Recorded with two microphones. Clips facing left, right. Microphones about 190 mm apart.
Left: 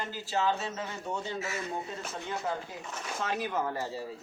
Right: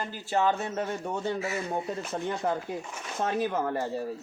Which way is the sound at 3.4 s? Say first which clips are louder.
Right 4 dB; 50° right (ahead or behind).